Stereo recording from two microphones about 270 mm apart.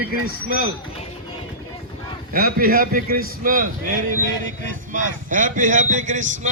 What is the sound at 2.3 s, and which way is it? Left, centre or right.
A man's voice, right.